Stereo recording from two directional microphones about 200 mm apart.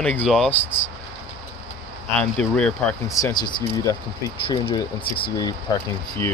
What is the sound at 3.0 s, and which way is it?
Speech, 15° left (ahead or behind).